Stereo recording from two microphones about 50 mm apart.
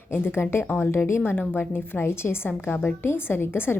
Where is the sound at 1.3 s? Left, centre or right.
Left.